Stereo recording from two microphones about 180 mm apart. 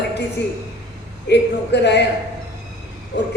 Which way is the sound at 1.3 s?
70° left (ahead or behind).